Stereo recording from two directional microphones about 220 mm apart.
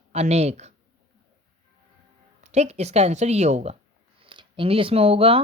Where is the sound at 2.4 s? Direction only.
30° right (ahead or behind).